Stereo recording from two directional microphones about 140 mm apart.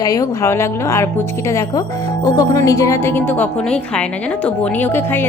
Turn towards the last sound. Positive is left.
turn(degrees=15)  # may be behind; listen again after turning